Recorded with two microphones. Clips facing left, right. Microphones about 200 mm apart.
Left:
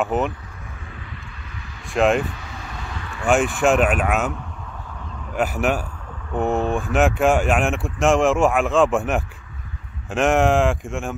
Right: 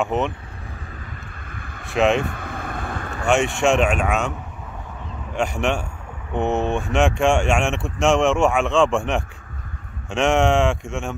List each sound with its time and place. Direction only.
0.0 s speech: centre (ahead or behind)
1.5 s vehicle: 55° right (ahead or behind)
2.0 s speech: centre (ahead or behind)
2.2 s vehicle: 55° right (ahead or behind)
3.3 s speech: centre (ahead or behind)
5.3 s speech: 5° left (ahead or behind)